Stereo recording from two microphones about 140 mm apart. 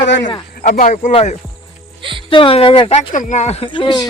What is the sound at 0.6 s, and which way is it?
Speech, 60° left (ahead or behind).